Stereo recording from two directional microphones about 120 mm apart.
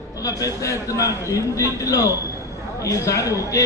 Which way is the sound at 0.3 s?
25° left (ahead or behind).